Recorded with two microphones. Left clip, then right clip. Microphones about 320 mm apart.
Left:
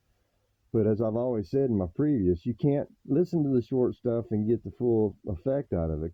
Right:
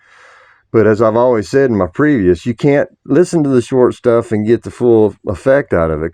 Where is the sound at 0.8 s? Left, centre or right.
Left.